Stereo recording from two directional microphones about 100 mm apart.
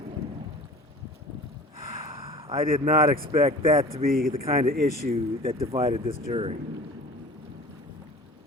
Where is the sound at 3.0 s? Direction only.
90° right.